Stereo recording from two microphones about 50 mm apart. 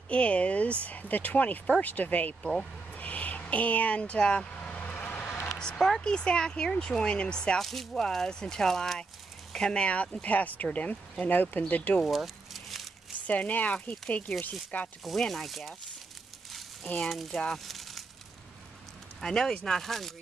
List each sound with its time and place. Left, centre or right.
0.1 s speech: left
2.9 s vehicle: left
5.5 s a sound: centre
5.9 s speech: centre
7.6 s speech: centre; by 12.0 s left
12.0 s a sound: centre
13.3 s speech: left
15.0 s speech: centre
16.8 s speech: left
17.1 s speech: centre
17.4 s a sound: centre
19.2 s speech: centre